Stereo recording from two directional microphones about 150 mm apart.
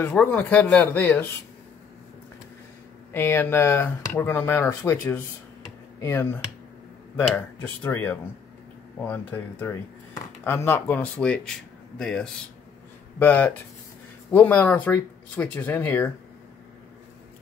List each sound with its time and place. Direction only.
0.0 s speech: 10° left (ahead or behind)
3.1 s speech: 15° left (ahead or behind)
7.8 s speech: 10° left (ahead or behind)